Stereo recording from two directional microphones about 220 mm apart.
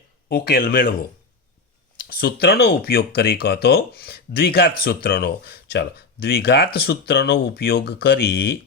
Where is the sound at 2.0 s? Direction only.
45° left (ahead or behind).